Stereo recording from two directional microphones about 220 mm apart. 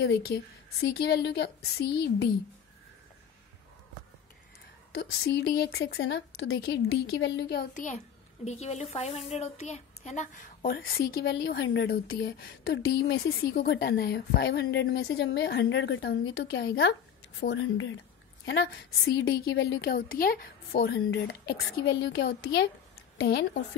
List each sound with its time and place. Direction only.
0.7 s speech: 50° left (ahead or behind)
5.2 s speech: 50° left (ahead or behind)
7.7 s speech: 35° left (ahead or behind)
17.5 s speech: 60° left (ahead or behind)
18.4 s speech: 50° left (ahead or behind)